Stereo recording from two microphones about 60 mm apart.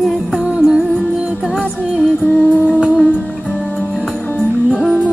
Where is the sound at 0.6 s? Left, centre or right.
Centre.